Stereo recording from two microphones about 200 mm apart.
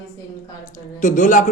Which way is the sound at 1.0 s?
40° left (ahead or behind).